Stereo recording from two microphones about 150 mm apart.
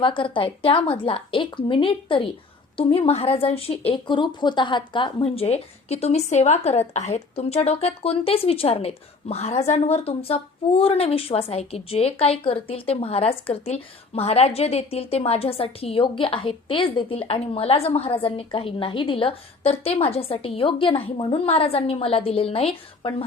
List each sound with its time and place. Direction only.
0.0 s speech: 35° left (ahead or behind)